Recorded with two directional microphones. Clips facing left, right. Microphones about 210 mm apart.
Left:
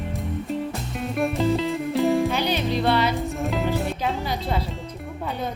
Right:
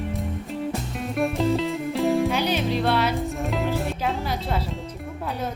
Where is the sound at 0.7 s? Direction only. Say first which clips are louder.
Even; centre (ahead or behind).